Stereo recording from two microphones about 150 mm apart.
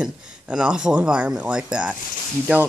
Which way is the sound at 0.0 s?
5° right (ahead or behind).